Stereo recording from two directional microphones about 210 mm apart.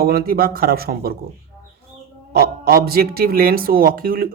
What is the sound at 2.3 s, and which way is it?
Speech, 50° right (ahead or behind).